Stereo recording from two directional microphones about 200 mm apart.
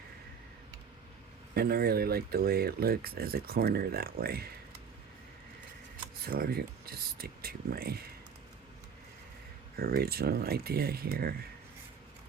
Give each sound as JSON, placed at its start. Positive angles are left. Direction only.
{"t": 1.5, "sound": "speech", "side_deg": -50}
{"t": 6.2, "sound": "speech", "side_deg": -50}
{"t": 9.7, "sound": "speech", "side_deg": -50}